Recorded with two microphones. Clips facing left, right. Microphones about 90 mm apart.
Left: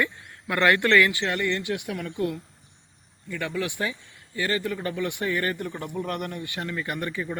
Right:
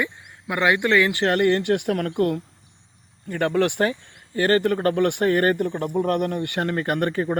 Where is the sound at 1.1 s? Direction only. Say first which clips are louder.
Right 7 dB; 45° right (ahead or behind).